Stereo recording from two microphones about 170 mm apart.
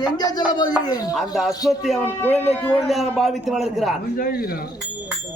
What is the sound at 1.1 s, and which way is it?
A man's voice, centre (ahead or behind).